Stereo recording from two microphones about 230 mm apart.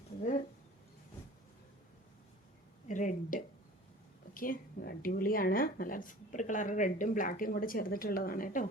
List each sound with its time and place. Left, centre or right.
2.8 s a woman's voice: left